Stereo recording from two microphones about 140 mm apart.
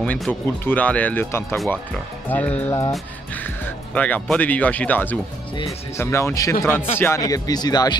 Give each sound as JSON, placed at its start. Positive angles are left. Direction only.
{"t": 0.0, "sound": "speech", "side_deg": 10}